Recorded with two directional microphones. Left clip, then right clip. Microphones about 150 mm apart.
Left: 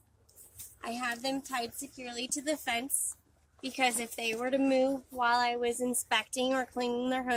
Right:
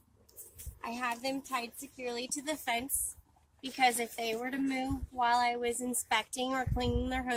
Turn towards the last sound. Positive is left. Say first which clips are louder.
# left 2 dB
turn(degrees=-15)  # may be behind; listen again after turning